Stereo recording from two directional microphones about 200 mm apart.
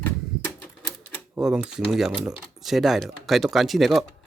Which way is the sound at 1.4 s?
5° right (ahead or behind).